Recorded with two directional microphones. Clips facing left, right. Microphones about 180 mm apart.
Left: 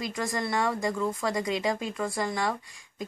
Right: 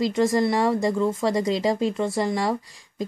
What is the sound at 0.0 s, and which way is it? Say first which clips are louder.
A woman's voice: right 11 dB; 25° right (ahead or behind).